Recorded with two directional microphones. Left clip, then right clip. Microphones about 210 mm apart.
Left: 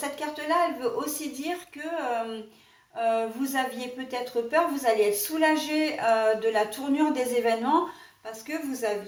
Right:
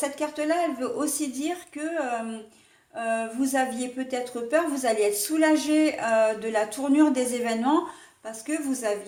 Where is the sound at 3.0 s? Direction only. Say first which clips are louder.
Left 1 dB; 45° right (ahead or behind).